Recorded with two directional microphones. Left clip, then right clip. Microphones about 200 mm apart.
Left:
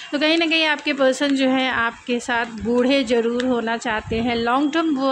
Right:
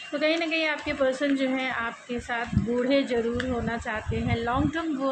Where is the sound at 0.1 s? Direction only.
55° left (ahead or behind).